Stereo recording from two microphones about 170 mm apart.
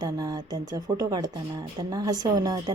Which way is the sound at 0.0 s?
20° right (ahead or behind).